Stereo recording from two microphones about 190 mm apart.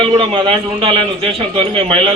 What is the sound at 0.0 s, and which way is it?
A man's voice, 30° right (ahead or behind).